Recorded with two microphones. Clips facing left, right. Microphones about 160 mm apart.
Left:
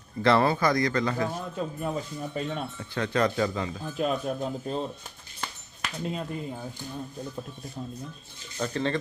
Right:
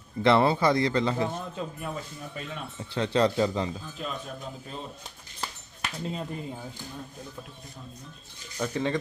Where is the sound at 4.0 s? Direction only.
55° left (ahead or behind).